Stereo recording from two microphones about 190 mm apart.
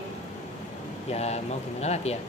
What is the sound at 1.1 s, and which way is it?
A man's voice, 35° left (ahead or behind).